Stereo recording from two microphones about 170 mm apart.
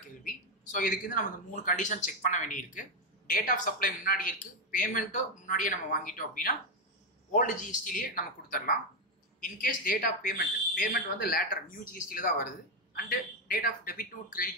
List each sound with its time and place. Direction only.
0.2 s speech: 55° left (ahead or behind)